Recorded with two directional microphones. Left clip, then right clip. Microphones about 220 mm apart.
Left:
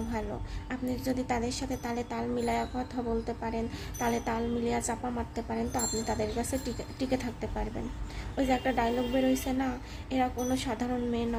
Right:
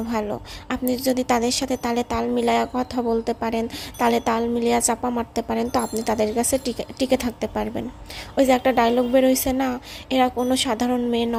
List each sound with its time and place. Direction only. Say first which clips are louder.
0.1 s a woman's voice: right 10 dB; 35° right (ahead or behind)